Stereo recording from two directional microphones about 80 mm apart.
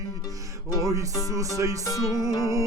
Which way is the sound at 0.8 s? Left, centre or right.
Right.